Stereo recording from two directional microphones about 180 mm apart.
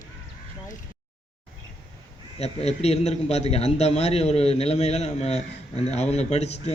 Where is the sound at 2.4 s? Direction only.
35° left (ahead or behind).